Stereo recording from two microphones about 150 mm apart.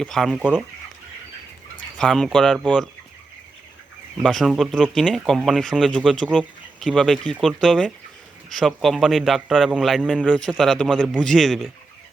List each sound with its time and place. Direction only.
0.0 s speech: 5° left (ahead or behind)
0.3 s speech: 10° right (ahead or behind)
2.0 s speech: 5° left (ahead or behind)
4.2 s speech: centre (ahead or behind)